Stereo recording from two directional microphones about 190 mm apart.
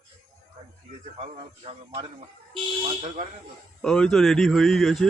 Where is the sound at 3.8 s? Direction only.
5° left (ahead or behind).